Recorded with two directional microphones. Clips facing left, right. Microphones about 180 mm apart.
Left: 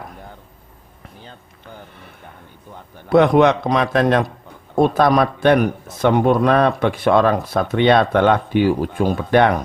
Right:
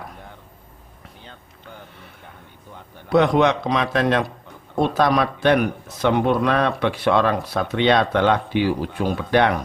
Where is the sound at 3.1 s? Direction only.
55° left (ahead or behind).